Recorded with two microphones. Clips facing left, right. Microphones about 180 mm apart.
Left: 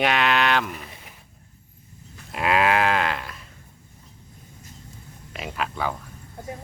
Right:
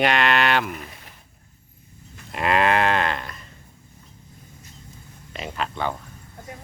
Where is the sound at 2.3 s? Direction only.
Centre (ahead or behind).